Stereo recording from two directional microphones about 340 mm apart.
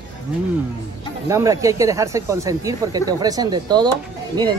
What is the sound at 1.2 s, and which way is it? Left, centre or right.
Speech, centre.